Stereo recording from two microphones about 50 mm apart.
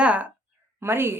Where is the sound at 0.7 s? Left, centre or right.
Right.